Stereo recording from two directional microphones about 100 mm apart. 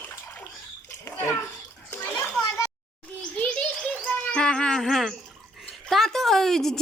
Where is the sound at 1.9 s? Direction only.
20° left (ahead or behind).